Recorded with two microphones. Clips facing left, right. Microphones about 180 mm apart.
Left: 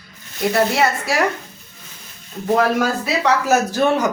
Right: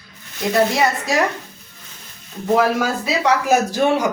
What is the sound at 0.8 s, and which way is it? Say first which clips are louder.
Speech: even; 20° right (ahead or behind).